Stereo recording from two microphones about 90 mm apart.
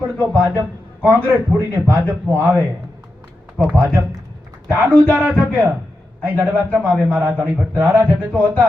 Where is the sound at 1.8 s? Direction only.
30° right (ahead or behind).